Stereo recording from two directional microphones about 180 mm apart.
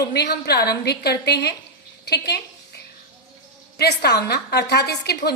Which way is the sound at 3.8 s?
65° left (ahead or behind).